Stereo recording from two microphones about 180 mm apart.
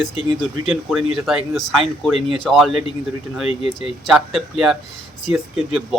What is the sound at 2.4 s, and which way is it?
Speech, centre (ahead or behind).